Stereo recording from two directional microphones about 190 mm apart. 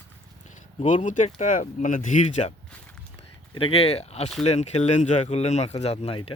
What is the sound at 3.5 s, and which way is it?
Speech, 30° left (ahead or behind).